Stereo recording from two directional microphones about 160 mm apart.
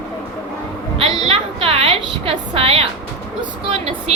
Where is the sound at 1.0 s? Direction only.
35° right (ahead or behind).